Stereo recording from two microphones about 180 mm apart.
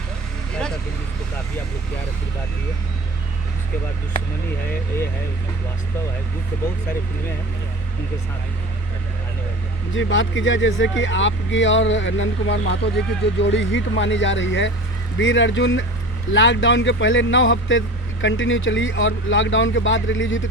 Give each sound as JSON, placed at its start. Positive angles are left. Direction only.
{"t": 9.9, "sound": "speech", "side_deg": 90}